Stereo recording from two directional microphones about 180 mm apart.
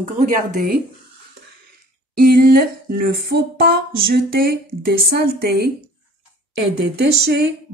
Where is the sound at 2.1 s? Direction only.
55° right (ahead or behind).